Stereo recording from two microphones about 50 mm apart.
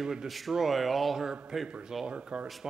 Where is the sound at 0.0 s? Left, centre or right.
Centre.